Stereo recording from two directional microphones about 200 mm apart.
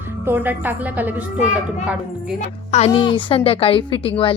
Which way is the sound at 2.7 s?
30° left (ahead or behind).